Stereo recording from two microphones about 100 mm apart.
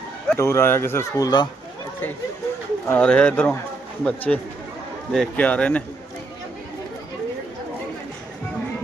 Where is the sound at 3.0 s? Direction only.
10° left (ahead or behind).